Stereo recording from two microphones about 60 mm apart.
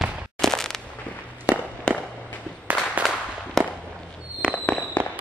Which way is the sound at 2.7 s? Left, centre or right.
Right.